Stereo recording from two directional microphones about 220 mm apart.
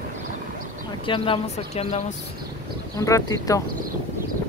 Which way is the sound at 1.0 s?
25° left (ahead or behind).